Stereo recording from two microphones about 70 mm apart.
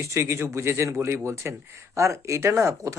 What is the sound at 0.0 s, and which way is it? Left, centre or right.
Speech, right.